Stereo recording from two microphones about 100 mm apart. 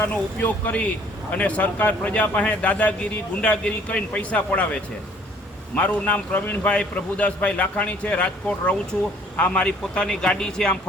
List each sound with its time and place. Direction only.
0.0 s a man's voice: 15° left (ahead or behind)